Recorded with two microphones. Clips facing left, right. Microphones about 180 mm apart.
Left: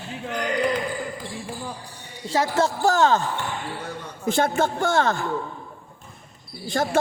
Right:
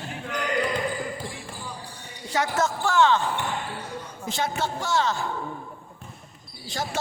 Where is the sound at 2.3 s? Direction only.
30° left (ahead or behind).